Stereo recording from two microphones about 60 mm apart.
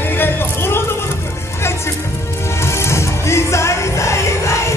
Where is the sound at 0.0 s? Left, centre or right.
Left.